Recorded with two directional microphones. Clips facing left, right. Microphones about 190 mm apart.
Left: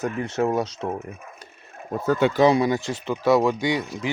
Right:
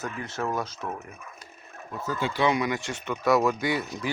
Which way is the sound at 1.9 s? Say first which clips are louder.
Left 10 dB; 60° left (ahead or behind).